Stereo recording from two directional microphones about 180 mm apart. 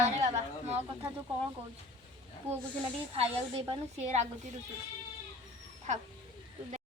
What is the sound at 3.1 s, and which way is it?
Speech, 35° right (ahead or behind).